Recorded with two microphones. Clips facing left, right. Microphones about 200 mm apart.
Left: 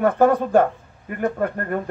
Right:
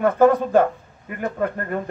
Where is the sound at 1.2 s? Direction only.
45° left (ahead or behind).